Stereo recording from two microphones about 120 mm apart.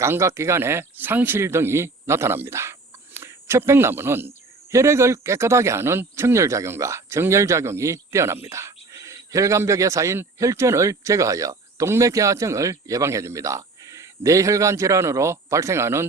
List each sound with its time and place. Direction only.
0.0 s a man's voice: 25° right (ahead or behind)